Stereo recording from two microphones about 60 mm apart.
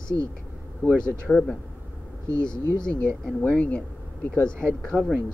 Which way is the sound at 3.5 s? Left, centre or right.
Left.